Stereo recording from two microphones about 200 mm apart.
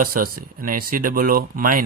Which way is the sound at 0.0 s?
45° right (ahead or behind).